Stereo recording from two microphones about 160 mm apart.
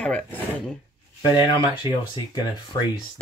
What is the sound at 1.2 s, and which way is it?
Speech, 30° left (ahead or behind).